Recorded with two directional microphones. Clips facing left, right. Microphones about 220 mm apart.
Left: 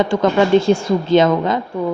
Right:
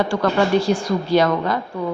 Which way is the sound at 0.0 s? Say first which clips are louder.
Left 4 dB; 20° left (ahead or behind).